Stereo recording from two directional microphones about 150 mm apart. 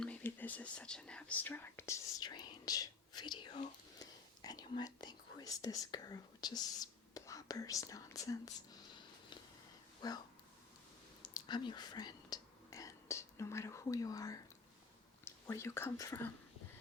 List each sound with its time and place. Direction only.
0.0 s whispering: 10° left (ahead or behind)
2.2 s whispering: 30° left (ahead or behind)
3.9 s a sound: 25° left (ahead or behind)
4.8 s whispering: 25° left (ahead or behind)
10.0 s speech: 25° left (ahead or behind)
11.2 s whispering: 30° left (ahead or behind)